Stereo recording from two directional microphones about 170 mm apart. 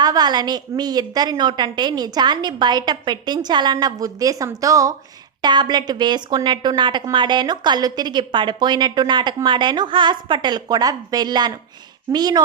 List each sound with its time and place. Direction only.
0.0 s speech: 25° right (ahead or behind)